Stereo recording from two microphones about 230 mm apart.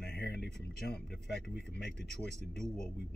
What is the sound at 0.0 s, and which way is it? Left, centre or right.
Speech, left.